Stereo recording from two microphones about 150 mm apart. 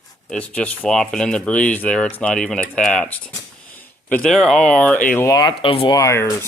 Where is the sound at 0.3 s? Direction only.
10° left (ahead or behind).